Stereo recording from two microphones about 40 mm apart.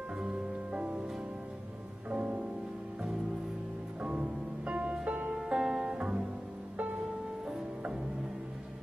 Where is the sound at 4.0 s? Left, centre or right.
Right.